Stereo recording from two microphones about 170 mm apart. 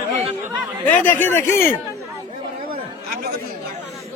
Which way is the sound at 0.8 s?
10° left (ahead or behind).